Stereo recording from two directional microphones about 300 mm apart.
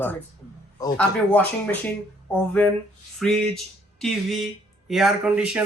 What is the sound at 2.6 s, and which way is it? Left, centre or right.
Speech, centre.